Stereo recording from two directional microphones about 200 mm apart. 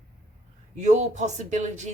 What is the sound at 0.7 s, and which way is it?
A woman's voice, 35° right (ahead or behind).